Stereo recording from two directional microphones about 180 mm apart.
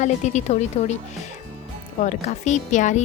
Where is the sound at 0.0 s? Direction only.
40° left (ahead or behind).